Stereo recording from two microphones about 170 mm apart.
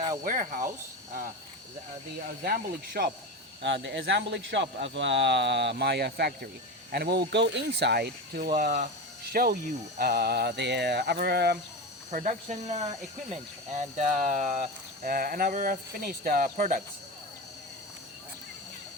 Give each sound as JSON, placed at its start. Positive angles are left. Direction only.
{"t": 0.3, "sound": "speech", "side_deg": -55}
{"t": 2.4, "sound": "speech", "side_deg": -60}
{"t": 3.6, "sound": "speech", "side_deg": -90}
{"t": 8.5, "sound": "speech", "side_deg": -55}
{"t": 12.1, "sound": "speech", "side_deg": -45}
{"t": 15.0, "sound": "speech", "side_deg": -60}